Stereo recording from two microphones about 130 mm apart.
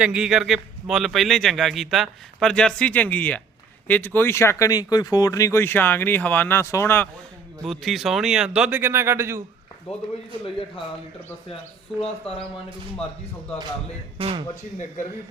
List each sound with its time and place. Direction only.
0.0 s a man's voice: 5° right (ahead or behind); by 7.1 s 15° left (ahead or behind)
7.6 s a man's voice: centre (ahead or behind)
8.8 s a man's voice: 20° right (ahead or behind)
9.9 s speech: 50° left (ahead or behind)
11.9 s speech: 50° left (ahead or behind)
14.2 s speech: 45° right (ahead or behind)